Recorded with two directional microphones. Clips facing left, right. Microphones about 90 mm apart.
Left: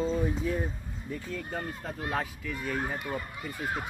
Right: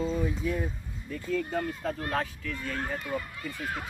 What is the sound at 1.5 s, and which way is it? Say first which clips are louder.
Speech: right 5 dB; 10° left (ahead or behind).